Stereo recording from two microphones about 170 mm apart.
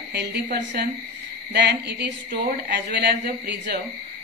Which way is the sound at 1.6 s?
80° right.